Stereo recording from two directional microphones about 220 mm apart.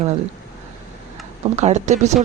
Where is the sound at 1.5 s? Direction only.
30° right (ahead or behind).